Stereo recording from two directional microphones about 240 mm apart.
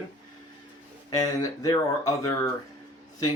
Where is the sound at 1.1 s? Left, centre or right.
Centre.